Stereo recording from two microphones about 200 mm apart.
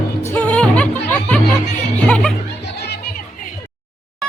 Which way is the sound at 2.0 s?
5° left (ahead or behind).